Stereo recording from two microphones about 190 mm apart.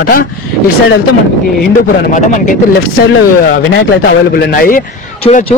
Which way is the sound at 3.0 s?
55° left (ahead or behind).